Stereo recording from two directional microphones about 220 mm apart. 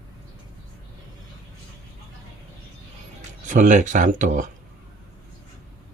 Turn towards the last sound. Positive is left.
turn(degrees=-35)  # may be behind; listen again after turning